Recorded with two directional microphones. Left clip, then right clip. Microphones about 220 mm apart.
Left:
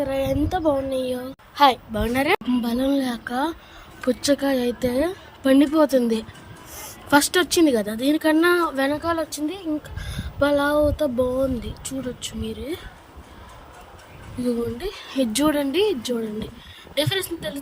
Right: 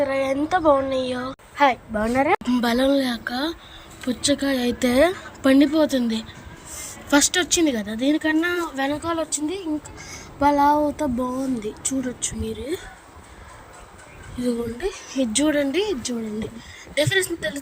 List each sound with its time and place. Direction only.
0.0 s a woman's voice: 5° left (ahead or behind)
2.5 s a woman's voice: 5° right (ahead or behind); by 12.8 s 10° left (ahead or behind)
14.4 s speech: 5° left (ahead or behind)
15.2 s a woman's voice: 20° left (ahead or behind); by 17.6 s centre (ahead or behind)